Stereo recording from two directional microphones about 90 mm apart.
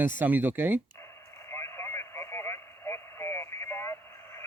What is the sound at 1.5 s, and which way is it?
Radio, 30° left (ahead or behind).